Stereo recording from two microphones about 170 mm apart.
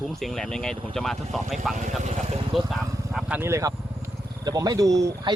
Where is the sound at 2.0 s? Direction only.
45° right (ahead or behind).